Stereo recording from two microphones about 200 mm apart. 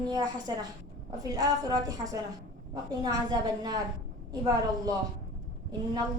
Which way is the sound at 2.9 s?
20° right (ahead or behind).